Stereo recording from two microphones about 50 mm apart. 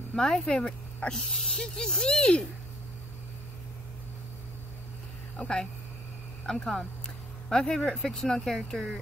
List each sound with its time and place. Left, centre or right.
0.1 s speech: centre
5.4 s speech: centre